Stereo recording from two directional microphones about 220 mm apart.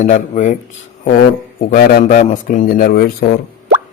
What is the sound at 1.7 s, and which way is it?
A man's voice, 35° left (ahead or behind).